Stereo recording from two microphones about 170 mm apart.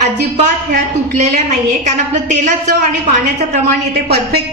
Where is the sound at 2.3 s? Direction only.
45° right (ahead or behind).